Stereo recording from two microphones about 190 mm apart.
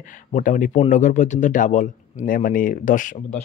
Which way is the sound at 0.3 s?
45° left (ahead or behind).